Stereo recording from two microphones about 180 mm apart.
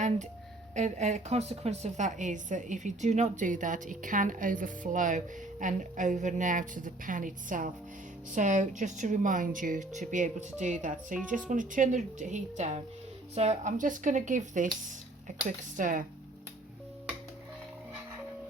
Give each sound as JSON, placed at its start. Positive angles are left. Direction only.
{"t": 0.7, "sound": "a woman's voice", "side_deg": -40}